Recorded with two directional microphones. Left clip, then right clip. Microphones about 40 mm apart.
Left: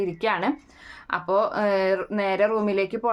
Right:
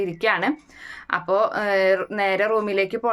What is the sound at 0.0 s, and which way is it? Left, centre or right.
A woman's voice, left.